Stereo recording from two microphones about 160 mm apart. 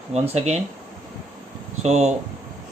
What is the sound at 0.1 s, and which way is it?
Speech, 45° right (ahead or behind).